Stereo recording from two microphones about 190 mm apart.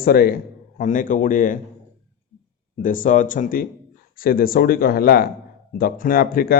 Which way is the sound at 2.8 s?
45° left (ahead or behind).